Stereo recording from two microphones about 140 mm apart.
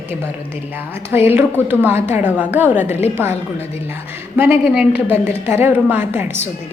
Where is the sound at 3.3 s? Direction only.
50° left (ahead or behind).